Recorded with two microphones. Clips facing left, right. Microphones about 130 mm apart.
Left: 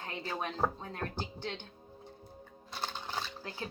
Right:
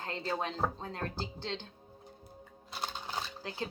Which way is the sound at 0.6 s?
Centre (ahead or behind).